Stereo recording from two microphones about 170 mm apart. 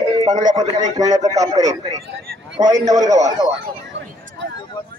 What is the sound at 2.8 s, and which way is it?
Speech, 20° right (ahead or behind).